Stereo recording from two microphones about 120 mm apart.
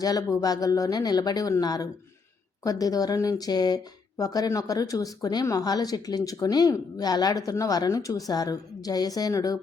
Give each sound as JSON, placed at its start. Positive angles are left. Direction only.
{"t": 0.0, "sound": "speech", "side_deg": 30}